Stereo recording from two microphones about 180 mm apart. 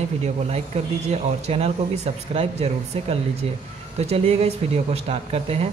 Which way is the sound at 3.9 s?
35° right (ahead or behind).